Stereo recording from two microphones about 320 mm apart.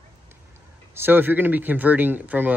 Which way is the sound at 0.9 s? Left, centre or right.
Centre.